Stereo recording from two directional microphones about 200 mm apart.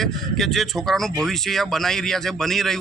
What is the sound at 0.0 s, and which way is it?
Speech, centre (ahead or behind).